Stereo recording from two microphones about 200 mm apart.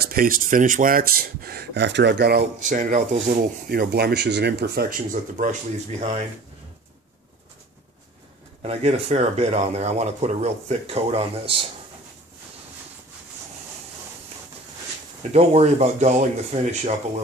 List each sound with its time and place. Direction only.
0.0 s speech: 45° right (ahead or behind)
8.6 s speech: 30° right (ahead or behind)
15.3 s speech: 30° right (ahead or behind)